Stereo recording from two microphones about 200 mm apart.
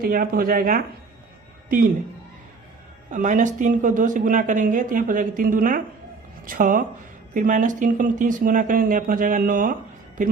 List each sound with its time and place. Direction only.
0.0 s speech: 45° right (ahead or behind)
3.1 s speech: 40° right (ahead or behind)